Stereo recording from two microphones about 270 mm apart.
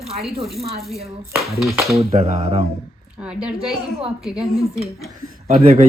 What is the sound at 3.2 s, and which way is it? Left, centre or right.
Speech, centre.